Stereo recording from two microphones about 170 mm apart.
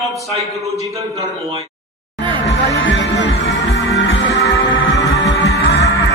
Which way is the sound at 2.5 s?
90° left.